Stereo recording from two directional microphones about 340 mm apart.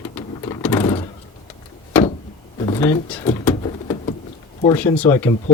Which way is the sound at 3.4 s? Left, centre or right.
Centre.